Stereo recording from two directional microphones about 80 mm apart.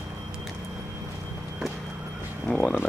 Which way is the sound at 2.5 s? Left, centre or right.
Centre.